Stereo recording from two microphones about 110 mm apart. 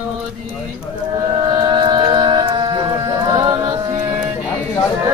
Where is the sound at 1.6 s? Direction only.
40° right (ahead or behind).